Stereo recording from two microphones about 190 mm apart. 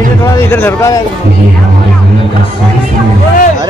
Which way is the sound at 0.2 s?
10° left (ahead or behind).